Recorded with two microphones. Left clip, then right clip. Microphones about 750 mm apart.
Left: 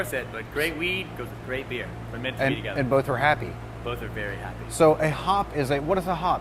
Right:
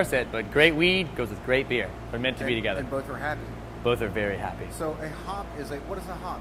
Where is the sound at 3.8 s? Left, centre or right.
Right.